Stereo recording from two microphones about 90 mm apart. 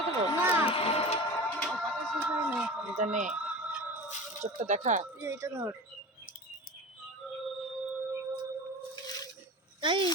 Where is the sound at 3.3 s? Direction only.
15° right (ahead or behind).